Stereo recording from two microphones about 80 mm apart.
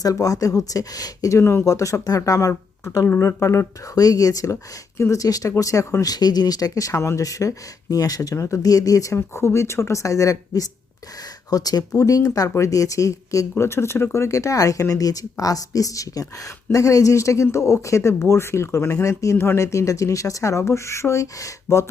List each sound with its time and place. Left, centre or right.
0.0 s speech: left
1.4 s speech: left
6.1 s speech: left